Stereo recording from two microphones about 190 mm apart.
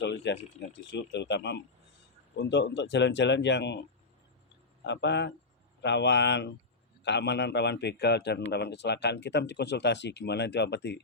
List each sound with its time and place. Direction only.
0.0 s speech: 60° left (ahead or behind)